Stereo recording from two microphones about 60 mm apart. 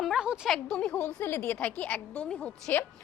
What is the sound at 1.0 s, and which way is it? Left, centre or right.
Speech, left.